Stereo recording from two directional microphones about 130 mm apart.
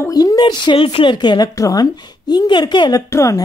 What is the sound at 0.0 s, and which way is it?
A woman's voice, 30° left (ahead or behind).